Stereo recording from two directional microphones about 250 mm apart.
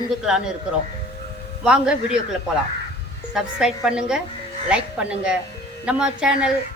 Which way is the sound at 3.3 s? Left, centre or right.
Centre.